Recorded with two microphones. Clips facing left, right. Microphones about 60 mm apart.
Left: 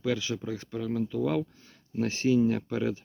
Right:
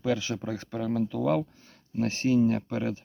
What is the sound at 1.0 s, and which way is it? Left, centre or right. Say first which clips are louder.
Speech: right 2 dB; right.